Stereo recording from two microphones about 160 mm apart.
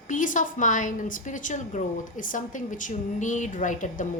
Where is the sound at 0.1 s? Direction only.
55° left (ahead or behind).